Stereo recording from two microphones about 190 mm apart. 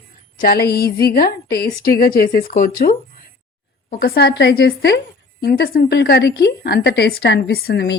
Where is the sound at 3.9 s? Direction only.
50° left (ahead or behind).